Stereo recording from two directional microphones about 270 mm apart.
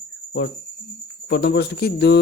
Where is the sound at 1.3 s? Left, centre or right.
Left.